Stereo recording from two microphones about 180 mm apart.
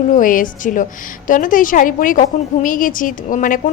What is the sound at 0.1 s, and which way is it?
A woman's voice, 50° left (ahead or behind).